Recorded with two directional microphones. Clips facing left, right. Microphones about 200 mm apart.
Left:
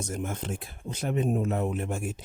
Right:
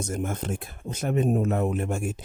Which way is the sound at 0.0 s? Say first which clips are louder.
Right 3 dB; 45° right (ahead or behind).